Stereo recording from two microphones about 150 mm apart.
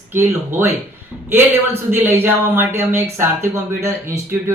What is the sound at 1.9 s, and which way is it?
Speech, 15° right (ahead or behind).